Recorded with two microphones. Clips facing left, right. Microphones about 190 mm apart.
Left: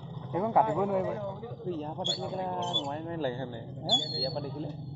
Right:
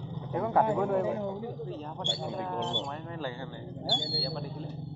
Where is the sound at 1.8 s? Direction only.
40° left (ahead or behind).